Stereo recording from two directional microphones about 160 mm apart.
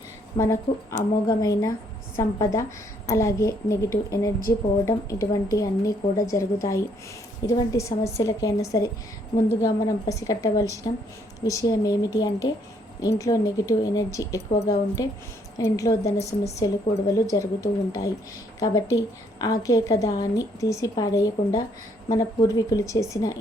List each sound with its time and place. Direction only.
0.3 s a woman's voice: 20° left (ahead or behind)